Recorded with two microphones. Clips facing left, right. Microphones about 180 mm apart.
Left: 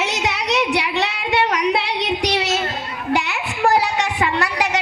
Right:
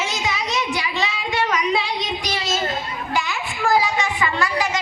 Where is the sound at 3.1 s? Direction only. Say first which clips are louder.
Left 4 dB; 65° left (ahead or behind).